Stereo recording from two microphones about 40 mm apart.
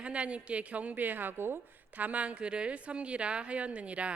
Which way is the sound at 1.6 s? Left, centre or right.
Right.